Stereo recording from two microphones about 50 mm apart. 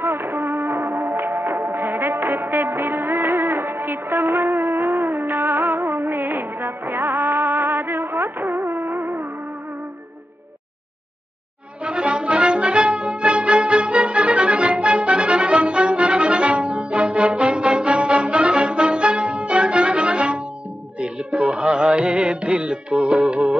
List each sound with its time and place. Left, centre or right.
0.0 s music: right
11.8 s brass instrument: right
21.0 s music: right